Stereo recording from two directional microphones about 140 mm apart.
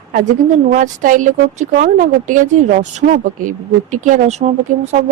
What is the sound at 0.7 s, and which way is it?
Speech, 70° right (ahead or behind).